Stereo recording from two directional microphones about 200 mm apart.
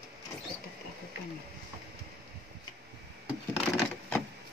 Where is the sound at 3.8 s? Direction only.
5° left (ahead or behind).